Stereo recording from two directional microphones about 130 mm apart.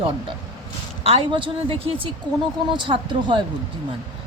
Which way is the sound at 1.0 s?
45° right (ahead or behind).